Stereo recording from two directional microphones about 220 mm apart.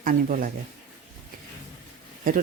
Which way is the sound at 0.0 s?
40° right (ahead or behind).